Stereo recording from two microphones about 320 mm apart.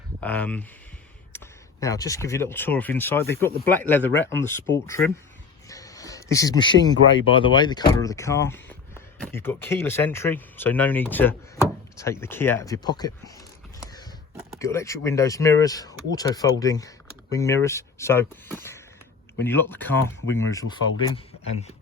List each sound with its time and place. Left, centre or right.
0.2 s speech: centre
1.3 s a sound: centre
1.8 s speech: centre
5.6 s a sound: centre
7.3 s speech: centre
14.6 s speech: centre
20.2 s speech: left
20.5 s speech: centre